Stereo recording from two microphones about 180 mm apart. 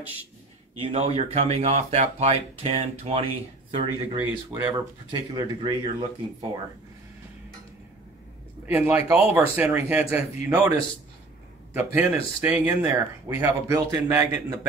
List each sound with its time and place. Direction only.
0.7 s speech: 30° right (ahead or behind)
4.2 s speech: 10° right (ahead or behind)
5.1 s speech: 25° right (ahead or behind)
8.6 s speech: 10° right (ahead or behind)
11.7 s speech: 15° right (ahead or behind)